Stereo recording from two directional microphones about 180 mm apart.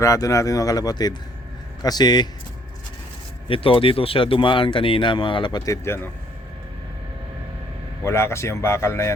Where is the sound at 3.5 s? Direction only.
30° left (ahead or behind); by 6.1 s 15° left (ahead or behind).